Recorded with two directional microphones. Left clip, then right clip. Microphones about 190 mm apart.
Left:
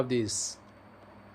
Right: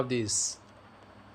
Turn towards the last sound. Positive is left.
turn(degrees=0)  # may be behind; listen again after turning